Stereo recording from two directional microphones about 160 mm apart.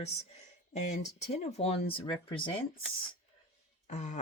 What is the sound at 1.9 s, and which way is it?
Speech, 30° left (ahead or behind).